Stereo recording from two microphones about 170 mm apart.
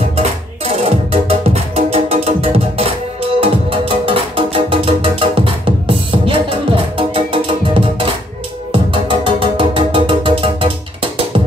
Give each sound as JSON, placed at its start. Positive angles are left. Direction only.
{"t": 0.1, "sound": "music", "side_deg": -40}